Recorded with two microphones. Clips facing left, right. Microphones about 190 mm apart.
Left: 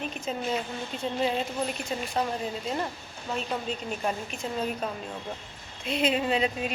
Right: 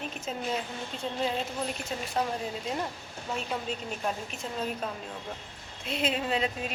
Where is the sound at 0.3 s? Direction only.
Centre (ahead or behind).